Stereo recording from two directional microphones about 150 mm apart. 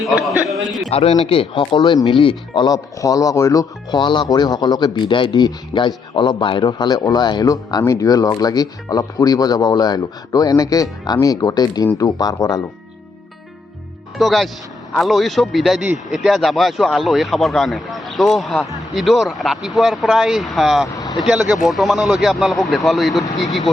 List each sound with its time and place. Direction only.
0.0 s speech: centre (ahead or behind)
0.9 s speech: 40° left (ahead or behind)
2.6 s speech: 25° left (ahead or behind)
14.2 s speech: centre (ahead or behind)
20.9 s vehicle: 25° left (ahead or behind)
21.2 s speech: centre (ahead or behind)